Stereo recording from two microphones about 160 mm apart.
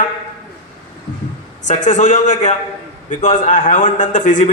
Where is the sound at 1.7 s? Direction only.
50° left (ahead or behind).